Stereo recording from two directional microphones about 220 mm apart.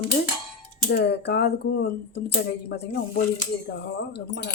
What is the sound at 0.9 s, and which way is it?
Speech, 50° left (ahead or behind).